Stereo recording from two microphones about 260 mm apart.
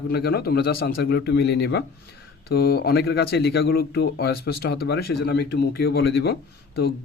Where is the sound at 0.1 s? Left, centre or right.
Left.